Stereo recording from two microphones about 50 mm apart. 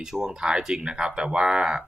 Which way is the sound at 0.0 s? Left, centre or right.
Centre.